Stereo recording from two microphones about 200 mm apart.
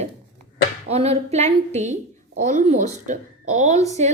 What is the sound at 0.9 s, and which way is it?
A woman's voice, 30° right (ahead or behind).